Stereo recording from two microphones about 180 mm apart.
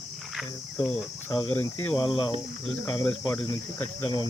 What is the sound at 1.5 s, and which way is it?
Speech, 10° left (ahead or behind).